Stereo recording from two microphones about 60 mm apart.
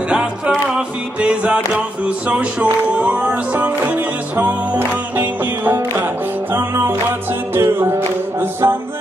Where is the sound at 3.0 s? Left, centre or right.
Right.